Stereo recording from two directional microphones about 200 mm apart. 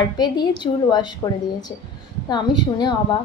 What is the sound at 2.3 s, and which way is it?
Speech, 20° left (ahead or behind).